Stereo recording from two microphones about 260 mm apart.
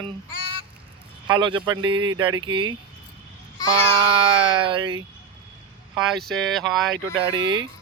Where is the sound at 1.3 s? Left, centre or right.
Centre.